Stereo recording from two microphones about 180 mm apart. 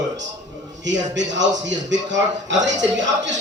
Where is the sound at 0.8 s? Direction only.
85° right.